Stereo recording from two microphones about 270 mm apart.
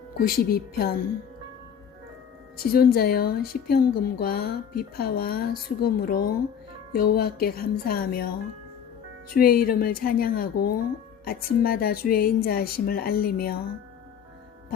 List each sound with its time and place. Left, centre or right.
0.2 s a woman's voice: left
2.6 s a woman's voice: left
9.3 s a woman's voice: left